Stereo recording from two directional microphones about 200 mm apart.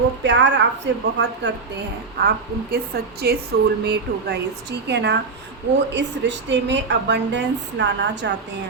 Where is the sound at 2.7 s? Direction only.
50° right (ahead or behind).